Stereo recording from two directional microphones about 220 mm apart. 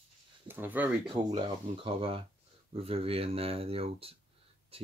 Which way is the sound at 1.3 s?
25° right (ahead or behind).